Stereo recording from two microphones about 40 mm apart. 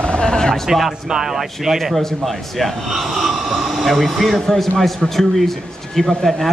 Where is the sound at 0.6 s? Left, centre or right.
Centre.